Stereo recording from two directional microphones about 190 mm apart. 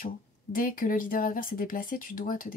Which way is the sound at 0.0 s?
45° left (ahead or behind).